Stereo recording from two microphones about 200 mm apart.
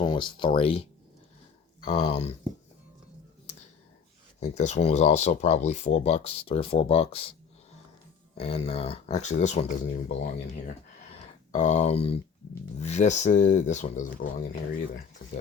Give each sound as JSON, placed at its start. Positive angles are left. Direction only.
{"t": 0.0, "sound": "speech", "side_deg": 25}
{"t": 1.8, "sound": "speech", "side_deg": 35}
{"t": 4.4, "sound": "speech", "side_deg": 35}
{"t": 8.4, "sound": "speech", "side_deg": 30}